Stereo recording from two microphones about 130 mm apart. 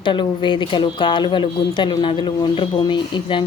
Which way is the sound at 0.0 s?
40° left (ahead or behind).